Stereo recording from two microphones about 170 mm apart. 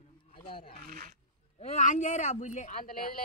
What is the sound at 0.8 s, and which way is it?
Wild animals, 60° right (ahead or behind).